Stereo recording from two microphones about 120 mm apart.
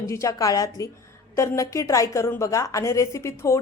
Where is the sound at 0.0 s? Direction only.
25° left (ahead or behind).